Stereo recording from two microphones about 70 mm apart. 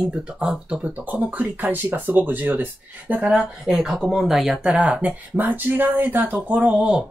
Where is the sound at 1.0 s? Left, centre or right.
Right.